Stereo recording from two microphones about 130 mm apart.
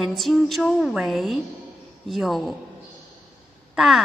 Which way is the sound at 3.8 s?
Centre (ahead or behind).